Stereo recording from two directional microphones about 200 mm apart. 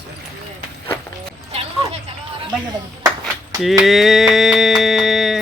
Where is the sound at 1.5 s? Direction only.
30° right (ahead or behind).